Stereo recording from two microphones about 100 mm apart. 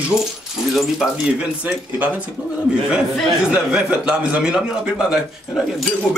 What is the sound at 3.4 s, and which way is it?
Speech, 10° right (ahead or behind).